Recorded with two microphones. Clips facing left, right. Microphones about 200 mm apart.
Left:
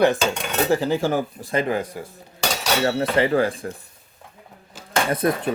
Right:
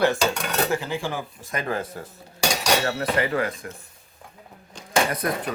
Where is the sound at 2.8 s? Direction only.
30° left (ahead or behind).